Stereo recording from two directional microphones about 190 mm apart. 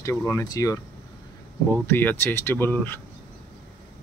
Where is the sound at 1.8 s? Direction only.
10° left (ahead or behind).